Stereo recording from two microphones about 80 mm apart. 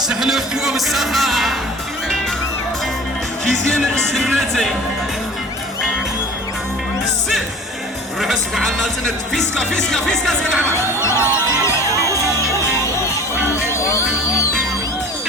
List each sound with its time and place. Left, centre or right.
0.1 s speech: centre
3.5 s speech: centre
8.2 s speech: centre
11.0 s music: left